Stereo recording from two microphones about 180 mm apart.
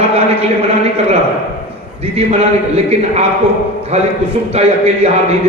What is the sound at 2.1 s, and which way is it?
Speech, 35° right (ahead or behind).